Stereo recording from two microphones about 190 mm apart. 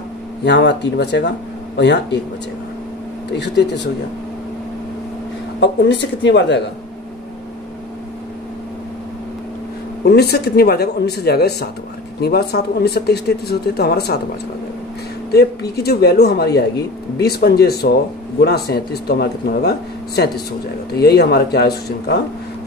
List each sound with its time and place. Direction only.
0.5 s speech: 65° left (ahead or behind)
3.3 s speech: 65° left (ahead or behind)
5.6 s speech: 65° left (ahead or behind)
10.0 s speech: 60° left (ahead or behind)
15.3 s speech: 60° left (ahead or behind)
20.9 s speech: 55° left (ahead or behind)